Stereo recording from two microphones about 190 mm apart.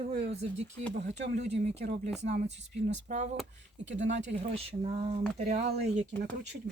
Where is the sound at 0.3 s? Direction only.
35° right (ahead or behind).